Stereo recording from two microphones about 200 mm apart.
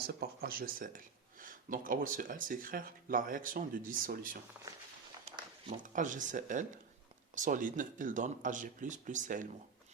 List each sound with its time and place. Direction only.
0.1 s speech: 50° right (ahead or behind)
5.2 s a sound: 25° right (ahead or behind)
5.8 s speech: 40° right (ahead or behind)